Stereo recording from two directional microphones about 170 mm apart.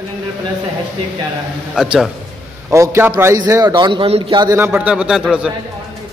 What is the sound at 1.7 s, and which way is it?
Speech, 5° right (ahead or behind).